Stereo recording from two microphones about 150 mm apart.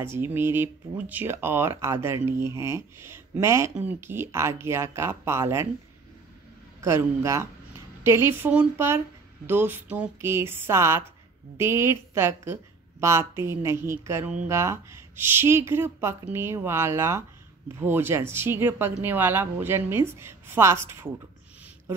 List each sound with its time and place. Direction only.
0.0 s speech: 15° right (ahead or behind)
6.8 s a man's voice: 20° right (ahead or behind)